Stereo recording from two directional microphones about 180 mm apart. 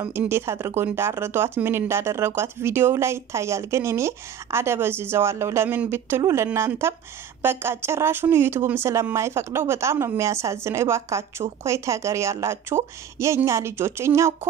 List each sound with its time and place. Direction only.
0.1 s speech: 15° right (ahead or behind)